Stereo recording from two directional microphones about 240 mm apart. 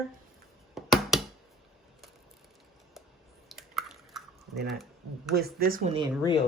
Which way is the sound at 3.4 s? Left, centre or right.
Centre.